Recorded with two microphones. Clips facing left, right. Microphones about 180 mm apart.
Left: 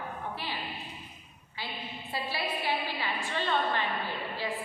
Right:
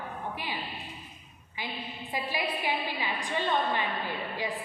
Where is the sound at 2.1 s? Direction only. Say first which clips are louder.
Right 2 dB; 15° right (ahead or behind).